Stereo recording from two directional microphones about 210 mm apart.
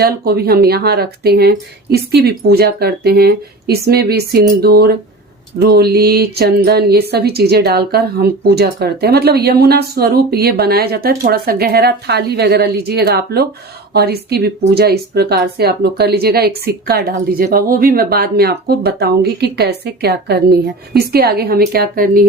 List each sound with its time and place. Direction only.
0.3 s speech: 45° right (ahead or behind)